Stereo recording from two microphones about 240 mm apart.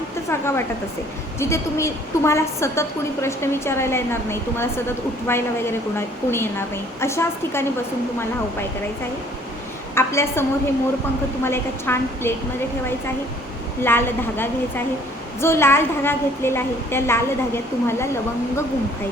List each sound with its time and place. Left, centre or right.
0.3 s a woman's voice: centre
9.9 s a woman's voice: centre
11.4 s a woman's voice: centre
13.8 s a woman's voice: centre